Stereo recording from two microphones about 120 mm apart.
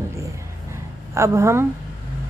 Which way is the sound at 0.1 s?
25° right (ahead or behind).